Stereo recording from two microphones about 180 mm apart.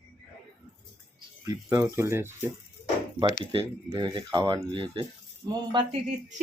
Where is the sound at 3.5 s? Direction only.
25° right (ahead or behind).